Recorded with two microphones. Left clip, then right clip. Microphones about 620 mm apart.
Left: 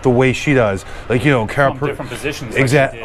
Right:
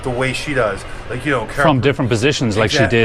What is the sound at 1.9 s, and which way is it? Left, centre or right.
Speech, right.